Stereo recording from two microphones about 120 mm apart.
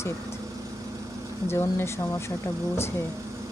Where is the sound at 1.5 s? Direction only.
20° left (ahead or behind).